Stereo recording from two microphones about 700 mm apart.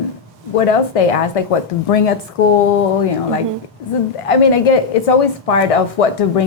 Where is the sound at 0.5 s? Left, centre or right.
Left.